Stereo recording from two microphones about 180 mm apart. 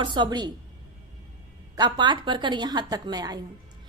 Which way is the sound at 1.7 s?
25° right (ahead or behind).